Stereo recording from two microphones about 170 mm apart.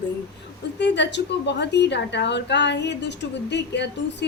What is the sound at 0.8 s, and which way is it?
A woman's voice, 90° left.